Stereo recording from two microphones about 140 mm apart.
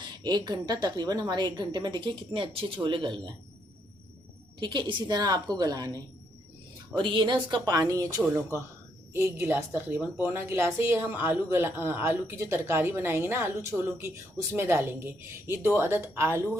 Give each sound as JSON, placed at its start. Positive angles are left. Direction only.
{"t": 0.2, "sound": "a woman's voice", "side_deg": -30}
{"t": 4.6, "sound": "a woman's voice", "side_deg": -35}